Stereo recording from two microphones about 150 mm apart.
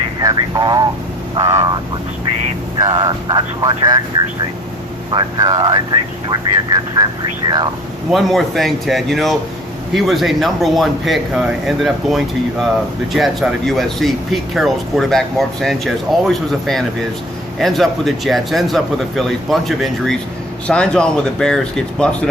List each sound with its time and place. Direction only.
0.2 s vehicle: 25° right (ahead or behind)
1.4 s speech: 20° right (ahead or behind)
5.1 s speech: 25° right (ahead or behind)
8.1 s speech: centre (ahead or behind)